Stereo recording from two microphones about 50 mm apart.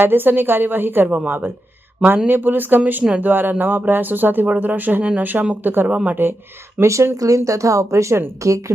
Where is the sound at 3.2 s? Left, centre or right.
Right.